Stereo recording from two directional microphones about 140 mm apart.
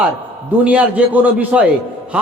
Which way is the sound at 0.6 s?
10° right (ahead or behind).